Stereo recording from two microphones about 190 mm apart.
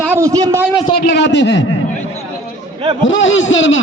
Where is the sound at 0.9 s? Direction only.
55° left (ahead or behind).